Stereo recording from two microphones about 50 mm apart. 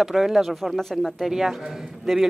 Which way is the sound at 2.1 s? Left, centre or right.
Centre.